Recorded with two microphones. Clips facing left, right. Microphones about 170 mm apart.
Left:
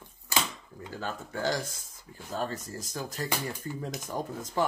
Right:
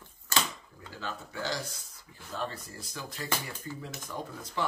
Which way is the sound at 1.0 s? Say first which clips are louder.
Left 4 dB; 50° left (ahead or behind).